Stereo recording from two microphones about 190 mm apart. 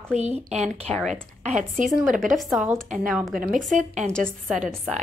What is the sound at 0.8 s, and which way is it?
Speech, 5° left (ahead or behind).